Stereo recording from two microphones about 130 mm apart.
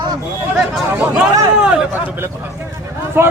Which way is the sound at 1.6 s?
10° right (ahead or behind).